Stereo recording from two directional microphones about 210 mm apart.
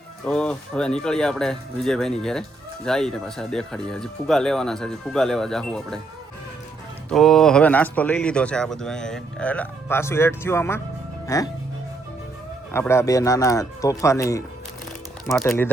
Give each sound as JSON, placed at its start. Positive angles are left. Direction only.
{"t": 0.3, "sound": "speech", "side_deg": 5}
{"t": 7.1, "sound": "speech", "side_deg": 0}
{"t": 12.7, "sound": "speech", "side_deg": 10}
{"t": 15.4, "sound": "speech", "side_deg": 10}